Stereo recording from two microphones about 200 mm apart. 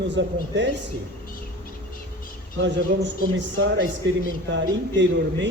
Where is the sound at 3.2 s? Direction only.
65° right (ahead or behind).